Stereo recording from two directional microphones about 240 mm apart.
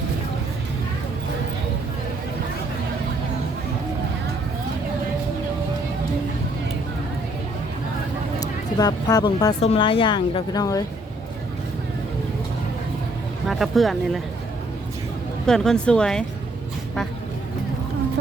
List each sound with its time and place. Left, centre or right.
8.4 s a woman's voice: centre
13.5 s speech: centre
15.4 s speech: centre